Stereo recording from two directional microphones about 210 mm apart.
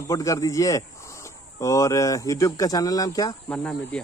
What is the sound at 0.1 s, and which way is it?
Speech, 15° left (ahead or behind).